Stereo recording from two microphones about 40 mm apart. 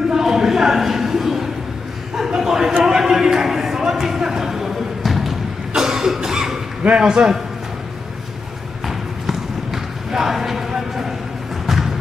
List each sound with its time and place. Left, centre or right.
0.1 s a sound: centre
5.7 s cough: centre
7.0 s a man's voice: centre
8.8 s basketball bounce: centre
11.6 s music: centre